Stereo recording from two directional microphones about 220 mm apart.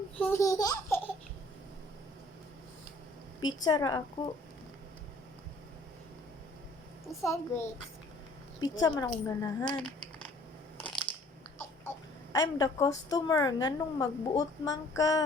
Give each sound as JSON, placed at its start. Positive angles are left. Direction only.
{"t": 0.2, "sound": "speech", "side_deg": 10}
{"t": 3.4, "sound": "a woman's voice", "side_deg": 15}
{"t": 7.2, "sound": "a woman's voice", "side_deg": 10}
{"t": 9.6, "sound": "a sound", "side_deg": 5}
{"t": 12.3, "sound": "a woman's voice", "side_deg": 15}